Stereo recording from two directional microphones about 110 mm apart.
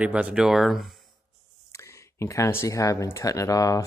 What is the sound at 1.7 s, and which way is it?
Speech, 25° left (ahead or behind).